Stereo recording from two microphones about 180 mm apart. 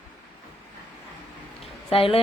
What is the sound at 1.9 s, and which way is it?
Speech, 30° left (ahead or behind).